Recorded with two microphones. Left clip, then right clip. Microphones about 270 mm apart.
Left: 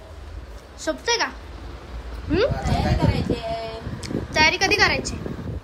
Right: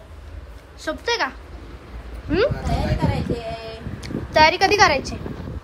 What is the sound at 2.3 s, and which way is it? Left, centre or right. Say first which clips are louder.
Speech: right 1 dB; centre.